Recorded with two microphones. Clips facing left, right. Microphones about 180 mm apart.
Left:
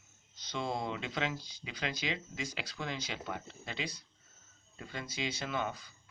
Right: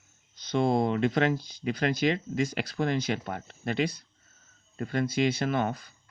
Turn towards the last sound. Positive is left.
turn(degrees=-55)  # may be behind; listen again after turning